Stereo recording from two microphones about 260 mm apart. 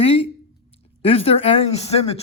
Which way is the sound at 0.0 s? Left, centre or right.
Left.